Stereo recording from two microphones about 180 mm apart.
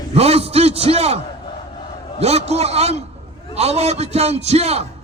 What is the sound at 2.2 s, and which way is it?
A man's voice, 35° right (ahead or behind).